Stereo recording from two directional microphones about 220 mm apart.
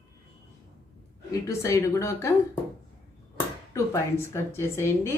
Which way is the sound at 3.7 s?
10° left (ahead or behind).